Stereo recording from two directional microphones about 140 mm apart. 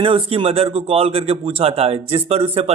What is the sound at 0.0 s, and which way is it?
Speech, 40° right (ahead or behind).